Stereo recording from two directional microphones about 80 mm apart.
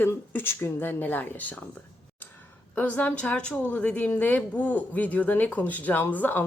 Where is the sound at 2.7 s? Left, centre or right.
Left.